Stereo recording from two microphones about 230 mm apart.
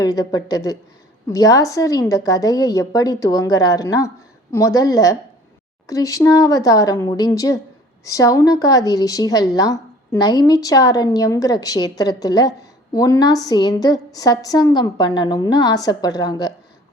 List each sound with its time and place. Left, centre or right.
0.0 s a woman's voice: centre